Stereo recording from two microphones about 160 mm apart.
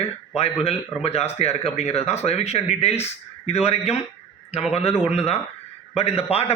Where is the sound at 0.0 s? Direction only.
40° left (ahead or behind).